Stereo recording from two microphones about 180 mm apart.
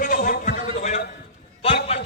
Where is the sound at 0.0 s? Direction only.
50° left (ahead or behind).